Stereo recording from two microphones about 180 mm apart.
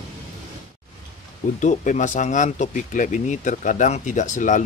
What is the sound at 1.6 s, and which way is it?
Speech, 45° left (ahead or behind).